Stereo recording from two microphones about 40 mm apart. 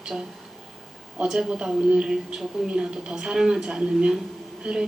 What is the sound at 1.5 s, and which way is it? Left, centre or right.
A woman's voice, right.